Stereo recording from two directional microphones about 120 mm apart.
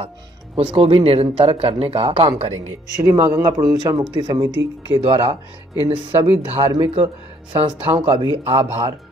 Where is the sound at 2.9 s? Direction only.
25° right (ahead or behind).